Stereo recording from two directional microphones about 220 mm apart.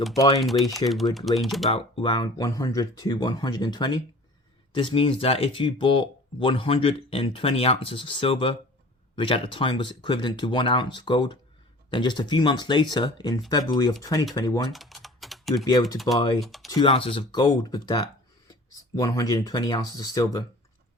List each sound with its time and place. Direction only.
0.3 s speech: centre (ahead or behind)
1.7 s speech: 20° left (ahead or behind)
14.7 s typing: centre (ahead or behind)
16.4 s speech: centre (ahead or behind)
16.6 s speech: 20° left (ahead or behind)